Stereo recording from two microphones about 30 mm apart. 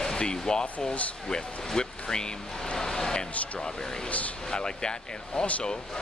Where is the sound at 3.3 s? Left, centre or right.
Left.